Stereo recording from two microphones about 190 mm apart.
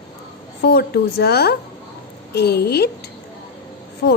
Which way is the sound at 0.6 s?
60° left (ahead or behind).